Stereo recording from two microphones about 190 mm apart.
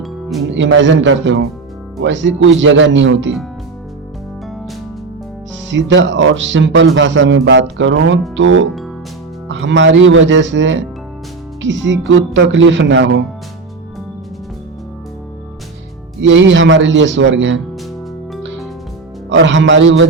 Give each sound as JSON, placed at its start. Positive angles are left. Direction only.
{"t": 0.0, "sound": "music", "side_deg": 0}
{"t": 0.5, "sound": "speech", "side_deg": -75}
{"t": 5.7, "sound": "speech", "side_deg": -75}
{"t": 16.2, "sound": "speech", "side_deg": -75}
{"t": 19.3, "sound": "speech", "side_deg": -75}